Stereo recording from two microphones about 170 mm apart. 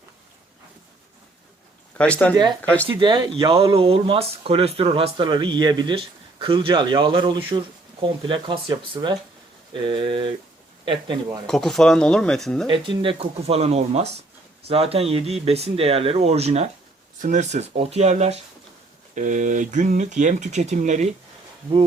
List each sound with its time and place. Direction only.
2.0 s speech: 5° left (ahead or behind)
2.3 s speech: 25° right (ahead or behind)
2.6 s speech: 10° left (ahead or behind)
3.0 s speech: 25° right (ahead or behind)
11.4 s speech: centre (ahead or behind)
12.7 s speech: 30° right (ahead or behind); by 21.1 s 45° right (ahead or behind)